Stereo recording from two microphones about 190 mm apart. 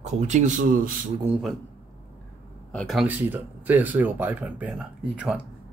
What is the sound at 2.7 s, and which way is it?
Speech, 5° left (ahead or behind).